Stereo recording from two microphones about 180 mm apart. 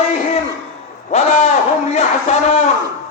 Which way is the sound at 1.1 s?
40° left (ahead or behind).